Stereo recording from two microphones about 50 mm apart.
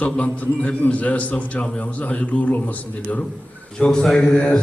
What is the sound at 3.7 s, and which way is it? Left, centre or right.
Speech, centre.